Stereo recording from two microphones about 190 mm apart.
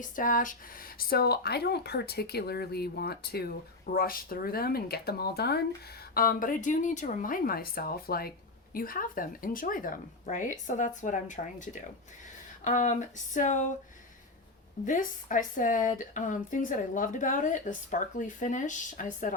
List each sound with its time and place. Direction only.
0.0 s speech: 45° left (ahead or behind)
14.8 s speech: 45° left (ahead or behind)